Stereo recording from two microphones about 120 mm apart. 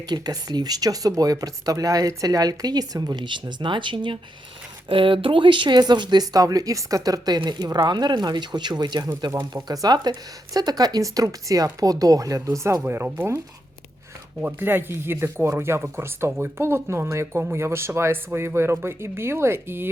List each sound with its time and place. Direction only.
0.0 s speech: 35° right (ahead or behind)
14.4 s speech: 15° right (ahead or behind)